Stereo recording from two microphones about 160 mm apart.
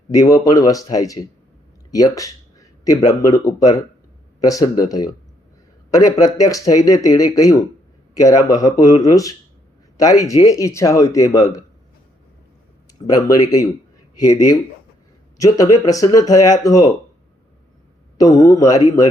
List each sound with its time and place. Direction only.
0.1 s speech: 20° left (ahead or behind)
13.1 s speech: 20° left (ahead or behind)
18.2 s speech: 20° left (ahead or behind)